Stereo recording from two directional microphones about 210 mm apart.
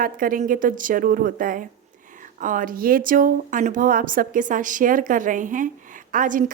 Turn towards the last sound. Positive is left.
turn(degrees=-40)  # may be behind; listen again after turning